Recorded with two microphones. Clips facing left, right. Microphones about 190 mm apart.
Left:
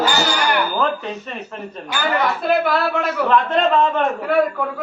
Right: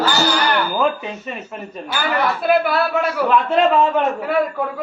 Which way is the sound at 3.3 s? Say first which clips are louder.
Right 1 dB; 10° right (ahead or behind).